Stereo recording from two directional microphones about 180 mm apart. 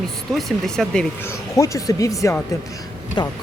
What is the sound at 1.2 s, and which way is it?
Speech, 15° left (ahead or behind).